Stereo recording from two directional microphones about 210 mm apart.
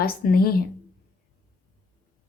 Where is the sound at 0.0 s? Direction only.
45° left (ahead or behind).